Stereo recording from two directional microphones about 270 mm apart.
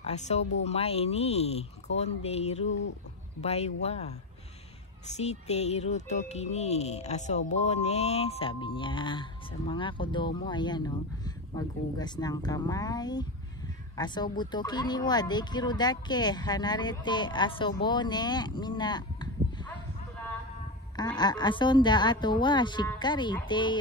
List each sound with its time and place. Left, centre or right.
0.0 s speech: left
20.9 s speech: centre